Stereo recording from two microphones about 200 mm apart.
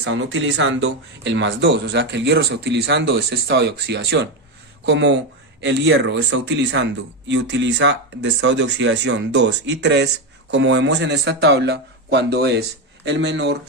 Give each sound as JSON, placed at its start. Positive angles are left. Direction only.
{"t": 0.0, "sound": "speech", "side_deg": -65}